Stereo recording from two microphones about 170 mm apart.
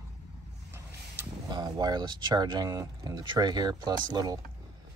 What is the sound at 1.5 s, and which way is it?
Speech, 25° right (ahead or behind).